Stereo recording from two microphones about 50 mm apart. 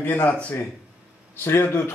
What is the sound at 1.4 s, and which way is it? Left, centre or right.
Speech, left.